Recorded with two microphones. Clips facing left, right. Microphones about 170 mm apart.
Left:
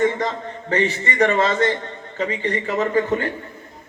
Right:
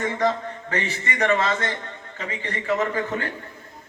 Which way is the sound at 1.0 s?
40° left (ahead or behind).